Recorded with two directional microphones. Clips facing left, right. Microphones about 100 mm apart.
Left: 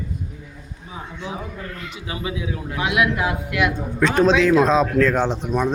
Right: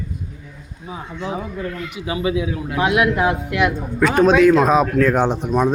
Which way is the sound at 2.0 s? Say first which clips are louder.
Right 7 dB; 25° right (ahead or behind).